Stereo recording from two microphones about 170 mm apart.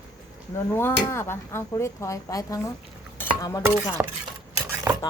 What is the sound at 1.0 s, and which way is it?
Speech, 15° left (ahead or behind).